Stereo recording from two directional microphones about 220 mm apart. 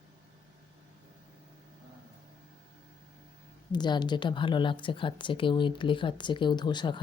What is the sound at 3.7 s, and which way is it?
Speech, 20° left (ahead or behind).